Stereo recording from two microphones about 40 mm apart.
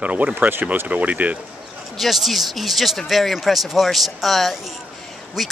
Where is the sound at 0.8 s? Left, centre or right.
Right.